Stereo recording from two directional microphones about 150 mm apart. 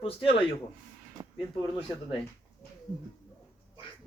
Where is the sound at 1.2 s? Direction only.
30° right (ahead or behind).